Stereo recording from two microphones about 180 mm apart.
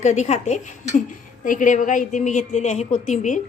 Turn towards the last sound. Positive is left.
turn(degrees=40)  # may be behind; listen again after turning